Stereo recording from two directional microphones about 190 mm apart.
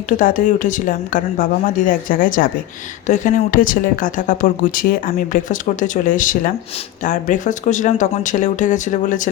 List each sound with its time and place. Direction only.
0.2 s speech: 45° left (ahead or behind)